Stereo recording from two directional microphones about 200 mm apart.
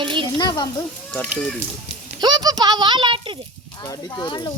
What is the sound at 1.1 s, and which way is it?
Speech, 5° left (ahead or behind).